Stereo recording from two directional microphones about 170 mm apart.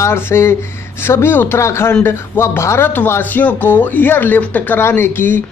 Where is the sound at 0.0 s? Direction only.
15° left (ahead or behind).